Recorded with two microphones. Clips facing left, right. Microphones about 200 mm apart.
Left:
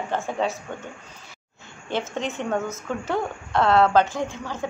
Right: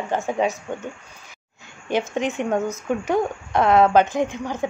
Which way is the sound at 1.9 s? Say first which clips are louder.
Right 5 dB; 15° right (ahead or behind).